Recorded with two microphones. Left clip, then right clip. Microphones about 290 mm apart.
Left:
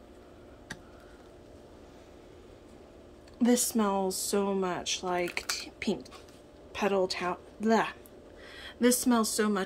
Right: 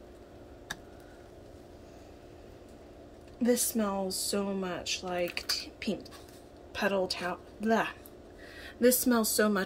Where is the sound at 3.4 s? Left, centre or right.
Centre.